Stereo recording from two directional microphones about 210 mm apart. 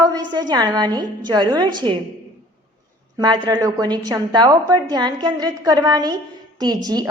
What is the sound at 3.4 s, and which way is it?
A woman's voice, 20° right (ahead or behind).